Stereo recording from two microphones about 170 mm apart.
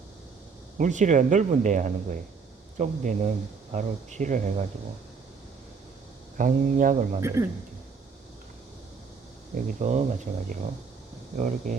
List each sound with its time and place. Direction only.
0.8 s speech: 45° right (ahead or behind)
6.3 s speech: 50° right (ahead or behind)
7.2 s speech: 15° right (ahead or behind)
9.6 s speech: 50° right (ahead or behind)